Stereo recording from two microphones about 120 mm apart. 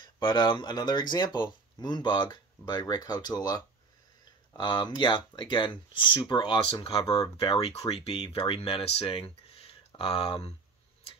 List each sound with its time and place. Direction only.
0.0 s speech: 40° left (ahead or behind)